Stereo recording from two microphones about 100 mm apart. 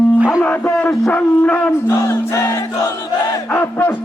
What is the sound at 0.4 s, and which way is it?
A man's voice, 15° left (ahead or behind).